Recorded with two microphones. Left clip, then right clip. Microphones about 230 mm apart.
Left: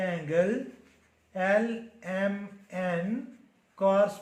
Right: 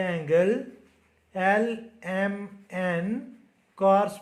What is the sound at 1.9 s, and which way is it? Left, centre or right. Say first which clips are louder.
Speech: right 1 dB; right.